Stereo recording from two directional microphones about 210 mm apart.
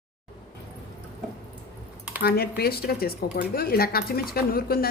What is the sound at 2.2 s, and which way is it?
Speech, 50° left (ahead or behind).